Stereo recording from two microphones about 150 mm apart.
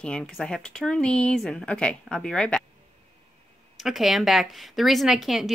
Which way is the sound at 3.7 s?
Centre (ahead or behind).